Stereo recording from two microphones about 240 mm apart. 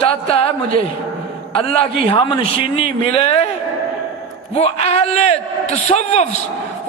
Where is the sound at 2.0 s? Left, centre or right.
Left.